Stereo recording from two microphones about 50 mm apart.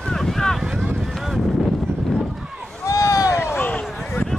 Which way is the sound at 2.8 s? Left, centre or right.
Left.